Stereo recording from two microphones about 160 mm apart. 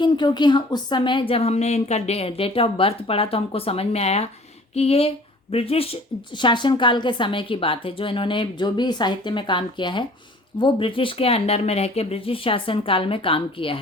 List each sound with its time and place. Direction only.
0.0 s a woman's voice: 25° left (ahead or behind)